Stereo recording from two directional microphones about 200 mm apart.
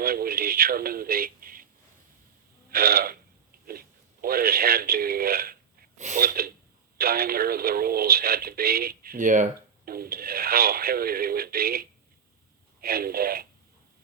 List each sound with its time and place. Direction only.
0.0 s speech: 50° right (ahead or behind)
2.6 s a sound: 50° right (ahead or behind)
3.7 s speech: 45° right (ahead or behind)